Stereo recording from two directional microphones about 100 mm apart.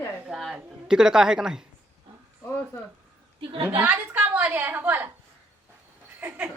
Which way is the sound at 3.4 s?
65° right (ahead or behind).